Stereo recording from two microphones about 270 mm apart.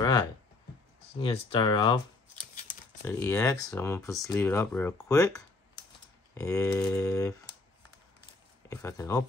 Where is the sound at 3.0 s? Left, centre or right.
Centre.